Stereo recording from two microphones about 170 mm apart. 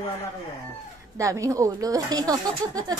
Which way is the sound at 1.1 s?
20° right (ahead or behind).